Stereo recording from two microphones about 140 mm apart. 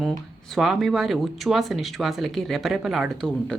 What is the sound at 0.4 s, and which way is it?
Speech, centre (ahead or behind).